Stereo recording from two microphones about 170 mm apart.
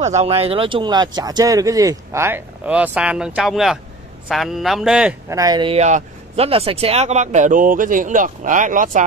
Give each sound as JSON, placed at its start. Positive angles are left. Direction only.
{"t": 0.0, "sound": "speech", "side_deg": -40}
{"t": 5.3, "sound": "speech", "side_deg": -20}
{"t": 5.8, "sound": "speech", "side_deg": -40}